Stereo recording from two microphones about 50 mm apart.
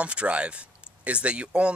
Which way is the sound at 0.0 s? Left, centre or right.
Right.